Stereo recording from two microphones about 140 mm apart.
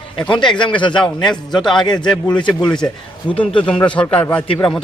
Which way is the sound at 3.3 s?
10° left (ahead or behind).